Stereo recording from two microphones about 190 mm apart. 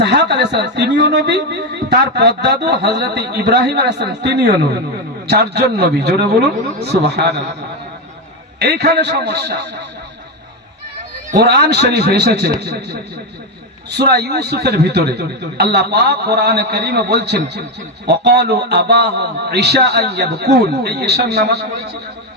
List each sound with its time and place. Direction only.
0.0 s speech: 65° right (ahead or behind)
8.5 s speech: 60° right (ahead or behind)
11.3 s speech: 60° right (ahead or behind)